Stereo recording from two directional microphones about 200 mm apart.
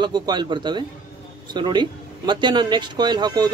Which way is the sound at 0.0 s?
20° right (ahead or behind).